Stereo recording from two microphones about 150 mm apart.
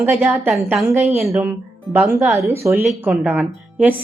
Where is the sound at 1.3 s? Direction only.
15° right (ahead or behind).